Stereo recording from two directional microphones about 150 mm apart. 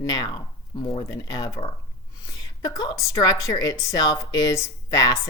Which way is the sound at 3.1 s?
25° left (ahead or behind).